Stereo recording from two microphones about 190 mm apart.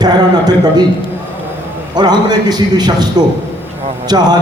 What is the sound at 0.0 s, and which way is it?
Speech, 20° right (ahead or behind).